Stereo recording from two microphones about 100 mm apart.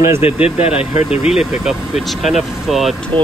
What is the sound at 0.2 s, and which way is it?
Speech, 80° left.